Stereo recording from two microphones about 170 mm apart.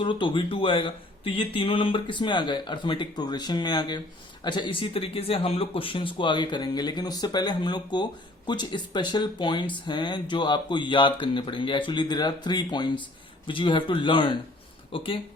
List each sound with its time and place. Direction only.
0.0 s speech: 30° left (ahead or behind)